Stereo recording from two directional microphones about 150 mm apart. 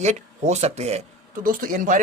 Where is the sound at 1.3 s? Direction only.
70° right (ahead or behind).